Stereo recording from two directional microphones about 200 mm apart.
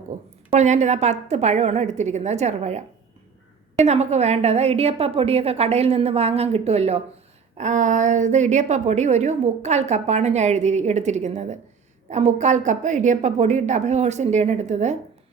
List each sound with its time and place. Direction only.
0.1 s a woman's voice: 35° right (ahead or behind)